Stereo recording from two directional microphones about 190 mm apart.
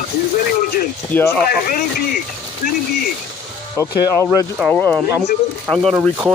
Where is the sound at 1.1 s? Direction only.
10° left (ahead or behind).